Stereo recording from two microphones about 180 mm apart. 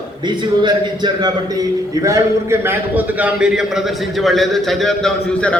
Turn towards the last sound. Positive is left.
turn(degrees=5)  # may be behind; listen again after turning